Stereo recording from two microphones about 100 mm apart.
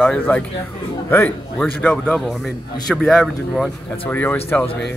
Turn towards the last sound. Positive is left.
turn(degrees=20)  # may be behind; listen again after turning